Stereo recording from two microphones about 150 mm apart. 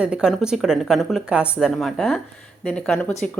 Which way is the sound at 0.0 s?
5° right (ahead or behind).